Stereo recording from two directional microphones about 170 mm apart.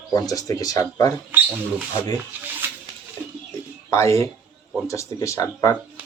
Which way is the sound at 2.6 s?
10° right (ahead or behind).